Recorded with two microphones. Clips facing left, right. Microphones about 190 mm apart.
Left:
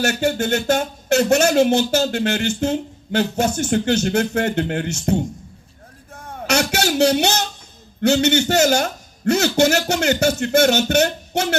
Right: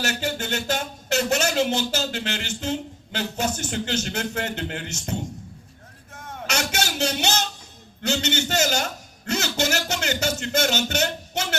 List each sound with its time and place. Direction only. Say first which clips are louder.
0.0 s speech: left 8 dB; 50° left (ahead or behind)
6.1 s music: left 3 dB; 35° left (ahead or behind)
6.5 s a man's voice: left 8 dB; 60° left (ahead or behind)